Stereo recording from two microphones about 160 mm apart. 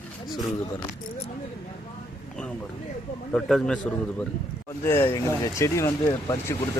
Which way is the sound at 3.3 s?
5° left (ahead or behind).